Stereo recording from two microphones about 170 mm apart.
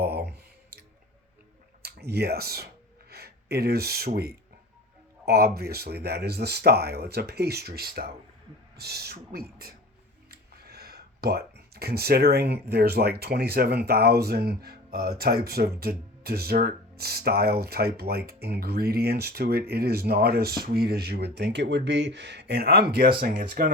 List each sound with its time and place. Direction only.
0.0 s clicking: 70° right (ahead or behind)
1.8 s speech: 70° right (ahead or behind)
10.3 s a sound: 65° right (ahead or behind)
12.7 s speech: 70° right (ahead or behind)
23.4 s speech: 50° right (ahead or behind)